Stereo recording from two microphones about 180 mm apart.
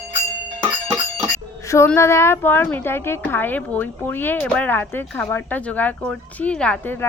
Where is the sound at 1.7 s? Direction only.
15° left (ahead or behind).